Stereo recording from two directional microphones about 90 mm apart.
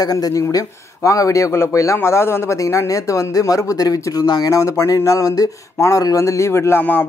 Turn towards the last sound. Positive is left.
turn(degrees=25)  # may be behind; listen again after turning